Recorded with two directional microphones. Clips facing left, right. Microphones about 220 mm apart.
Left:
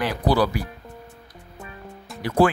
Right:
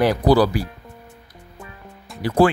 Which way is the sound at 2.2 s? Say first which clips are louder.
Right 3 dB; 30° right (ahead or behind).